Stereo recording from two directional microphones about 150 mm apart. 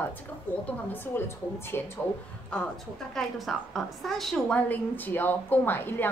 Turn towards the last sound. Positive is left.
turn(degrees=15)  # may be behind; listen again after turning